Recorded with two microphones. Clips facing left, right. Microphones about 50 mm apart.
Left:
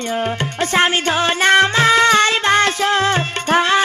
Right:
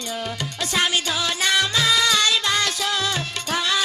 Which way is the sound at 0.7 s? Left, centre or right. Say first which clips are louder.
Left 6 dB; left.